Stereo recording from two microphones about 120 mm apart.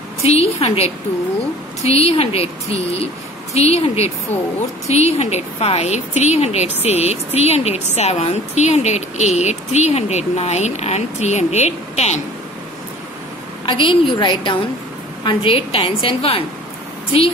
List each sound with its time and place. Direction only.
0.2 s a woman's voice: 60° left (ahead or behind)
13.7 s a woman's voice: 45° left (ahead or behind)